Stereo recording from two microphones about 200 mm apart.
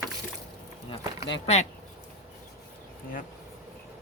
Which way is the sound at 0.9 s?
30° left (ahead or behind).